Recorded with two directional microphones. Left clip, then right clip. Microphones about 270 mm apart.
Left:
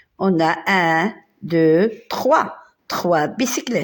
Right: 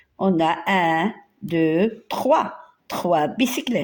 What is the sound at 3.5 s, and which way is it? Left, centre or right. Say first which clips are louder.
Speech: left 2 dB; centre.